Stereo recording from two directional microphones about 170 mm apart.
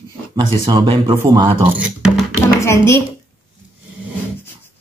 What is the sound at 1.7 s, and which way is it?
Speech, 5° right (ahead or behind).